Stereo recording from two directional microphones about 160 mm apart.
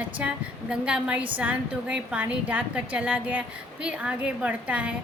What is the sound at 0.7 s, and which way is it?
A woman's voice, 5° right (ahead or behind).